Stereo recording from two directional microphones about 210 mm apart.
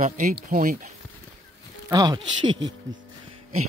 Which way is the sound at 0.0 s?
40° right (ahead or behind).